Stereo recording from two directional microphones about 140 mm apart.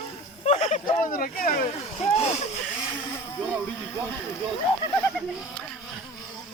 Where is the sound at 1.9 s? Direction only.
45° left (ahead or behind).